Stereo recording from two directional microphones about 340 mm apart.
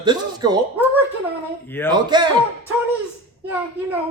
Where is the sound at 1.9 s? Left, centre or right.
Centre.